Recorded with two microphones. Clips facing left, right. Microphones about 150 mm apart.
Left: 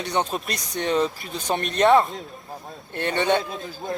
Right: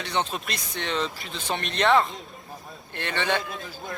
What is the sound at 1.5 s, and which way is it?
Speech, 45° left (ahead or behind).